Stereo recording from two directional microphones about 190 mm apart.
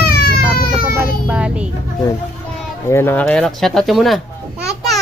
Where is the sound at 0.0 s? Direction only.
55° left (ahead or behind).